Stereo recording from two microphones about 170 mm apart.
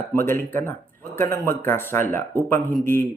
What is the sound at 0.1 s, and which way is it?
Speech, 15° left (ahead or behind).